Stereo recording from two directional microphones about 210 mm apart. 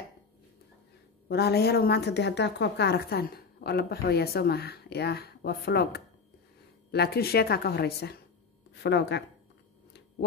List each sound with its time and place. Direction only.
1.3 s a woman's voice: 50° left (ahead or behind)
6.9 s a woman's voice: 50° left (ahead or behind)